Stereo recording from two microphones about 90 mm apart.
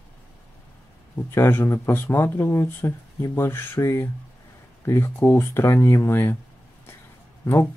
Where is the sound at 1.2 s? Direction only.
25° left (ahead or behind).